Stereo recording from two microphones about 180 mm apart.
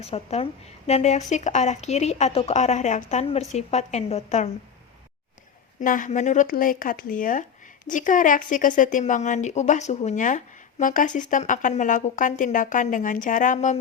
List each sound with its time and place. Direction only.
0.0 s speech: 35° left (ahead or behind)
5.8 s speech: 45° left (ahead or behind)